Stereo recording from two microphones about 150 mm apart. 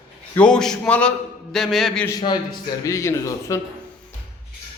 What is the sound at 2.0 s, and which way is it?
Speech, 25° left (ahead or behind).